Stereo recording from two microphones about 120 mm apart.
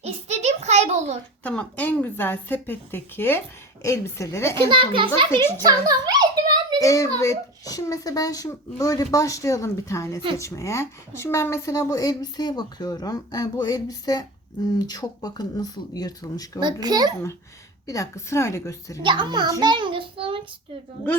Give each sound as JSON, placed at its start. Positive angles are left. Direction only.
{"t": 0.0, "sound": "a sound", "side_deg": -60}
{"t": 1.5, "sound": "a woman's voice", "side_deg": 10}
{"t": 4.5, "sound": "a child's voice", "side_deg": -45}
{"t": 6.7, "sound": "a child's voice", "side_deg": 25}
{"t": 16.6, "sound": "a child's voice", "side_deg": -35}
{"t": 17.8, "sound": "a child's voice", "side_deg": 25}
{"t": 19.0, "sound": "a child's voice", "side_deg": -40}